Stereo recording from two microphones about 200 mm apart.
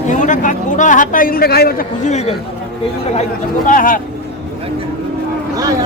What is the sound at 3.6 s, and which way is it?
Speech, 45° left (ahead or behind).